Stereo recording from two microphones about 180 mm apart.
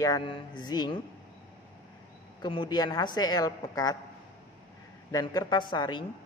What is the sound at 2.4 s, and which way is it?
A woman's voice, 25° left (ahead or behind).